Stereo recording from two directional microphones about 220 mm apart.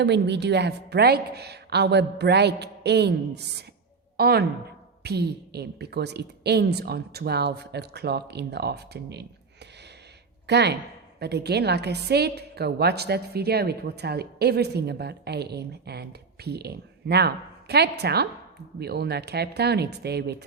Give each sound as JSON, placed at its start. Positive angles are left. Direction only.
{"t": 0.0, "sound": "a woman's voice", "side_deg": -50}
{"t": 10.4, "sound": "a woman's voice", "side_deg": -50}